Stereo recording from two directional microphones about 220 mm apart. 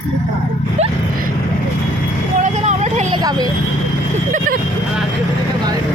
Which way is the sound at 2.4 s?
30° right (ahead or behind).